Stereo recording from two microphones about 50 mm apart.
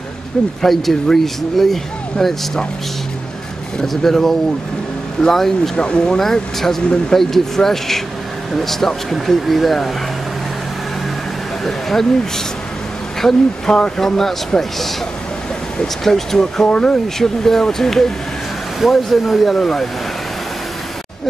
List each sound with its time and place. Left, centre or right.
0.6 s speech: centre
3.8 s speech: centre
6.1 s speech: centre
11.6 s a sound: centre
13.2 s speech: centre
16.0 s speech: centre
16.6 s speech: centre
17.2 s speech: centre